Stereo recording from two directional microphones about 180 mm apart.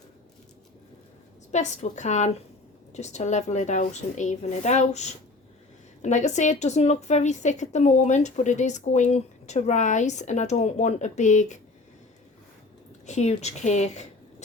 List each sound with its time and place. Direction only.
1.5 s speech: 40° left (ahead or behind)
13.1 s speech: 40° left (ahead or behind)